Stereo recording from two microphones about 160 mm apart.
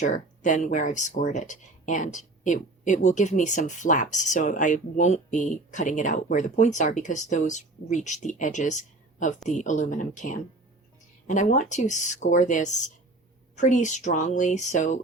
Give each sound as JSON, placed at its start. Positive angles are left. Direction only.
{"t": 0.0, "sound": "speech", "side_deg": 50}